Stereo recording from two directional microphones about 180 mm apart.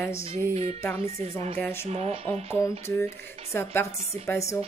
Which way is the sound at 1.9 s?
35° right (ahead or behind).